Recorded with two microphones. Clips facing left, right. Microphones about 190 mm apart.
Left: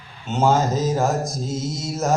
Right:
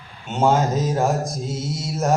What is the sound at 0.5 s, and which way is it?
Music, 10° right (ahead or behind).